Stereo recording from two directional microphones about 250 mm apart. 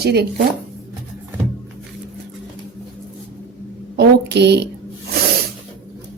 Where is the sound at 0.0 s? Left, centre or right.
Right.